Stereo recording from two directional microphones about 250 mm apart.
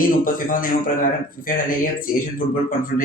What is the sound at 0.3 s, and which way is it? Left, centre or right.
Speech, left.